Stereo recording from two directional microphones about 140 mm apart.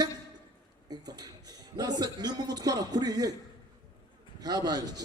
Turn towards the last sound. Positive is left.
turn(degrees=-25)  # may be behind; listen again after turning